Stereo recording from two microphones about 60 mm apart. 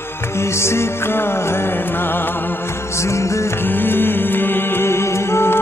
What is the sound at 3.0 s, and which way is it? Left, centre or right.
Music, left.